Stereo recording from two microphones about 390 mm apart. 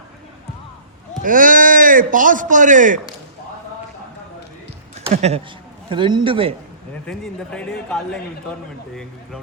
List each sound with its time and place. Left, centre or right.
1.2 s speech: right
4.9 s a sound: centre
5.9 s a man's voice: centre
7.1 s speech: centre